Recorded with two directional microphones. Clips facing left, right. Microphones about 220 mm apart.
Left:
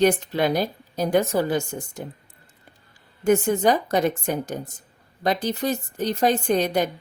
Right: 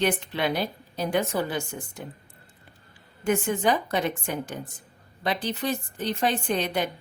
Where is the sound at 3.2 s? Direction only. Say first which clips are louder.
Left 5 dB; 40° left (ahead or behind).